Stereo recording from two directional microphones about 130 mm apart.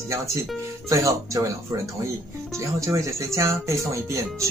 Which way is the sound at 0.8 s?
25° right (ahead or behind).